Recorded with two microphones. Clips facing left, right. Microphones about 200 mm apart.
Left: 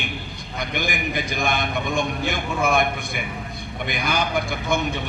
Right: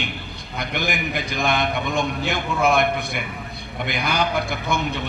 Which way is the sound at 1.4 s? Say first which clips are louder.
Right 3 dB; 50° left (ahead or behind).